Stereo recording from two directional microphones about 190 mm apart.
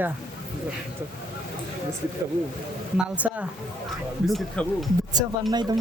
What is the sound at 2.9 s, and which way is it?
Speech, 5° right (ahead or behind).